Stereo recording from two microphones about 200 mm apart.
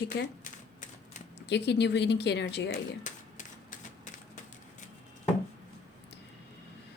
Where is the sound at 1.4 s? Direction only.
60° left (ahead or behind).